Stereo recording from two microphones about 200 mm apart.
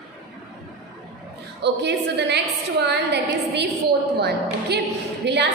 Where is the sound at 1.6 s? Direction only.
60° right (ahead or behind).